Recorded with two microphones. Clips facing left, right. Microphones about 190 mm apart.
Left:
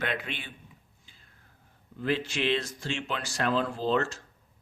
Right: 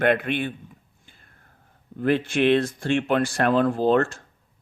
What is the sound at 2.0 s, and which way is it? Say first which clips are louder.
Speech: right 8 dB; 55° right (ahead or behind).